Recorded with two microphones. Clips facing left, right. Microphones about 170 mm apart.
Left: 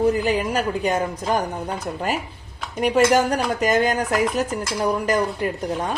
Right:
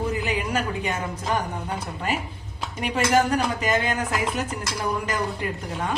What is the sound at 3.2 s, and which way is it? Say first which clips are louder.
A woman's voice: left 3 dB; 40° left (ahead or behind).